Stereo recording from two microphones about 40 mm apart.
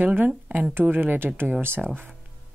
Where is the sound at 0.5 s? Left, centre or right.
Right.